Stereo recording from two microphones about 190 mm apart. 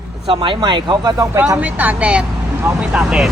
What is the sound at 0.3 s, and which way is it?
Speech, 25° right (ahead or behind).